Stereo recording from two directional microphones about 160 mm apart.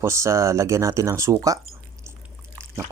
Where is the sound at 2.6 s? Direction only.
15° right (ahead or behind).